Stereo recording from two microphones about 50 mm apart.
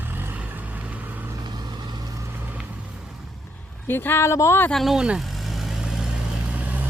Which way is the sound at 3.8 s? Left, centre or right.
Left.